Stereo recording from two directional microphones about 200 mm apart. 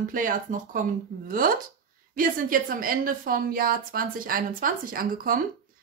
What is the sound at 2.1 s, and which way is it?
A woman's voice, 45° right (ahead or behind).